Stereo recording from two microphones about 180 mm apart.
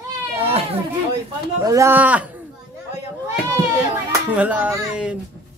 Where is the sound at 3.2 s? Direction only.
15° right (ahead or behind).